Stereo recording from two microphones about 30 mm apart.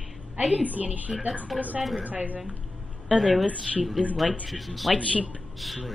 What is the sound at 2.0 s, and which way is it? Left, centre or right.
Speech, right.